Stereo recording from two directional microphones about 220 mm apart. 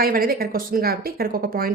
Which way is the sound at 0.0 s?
40° right (ahead or behind).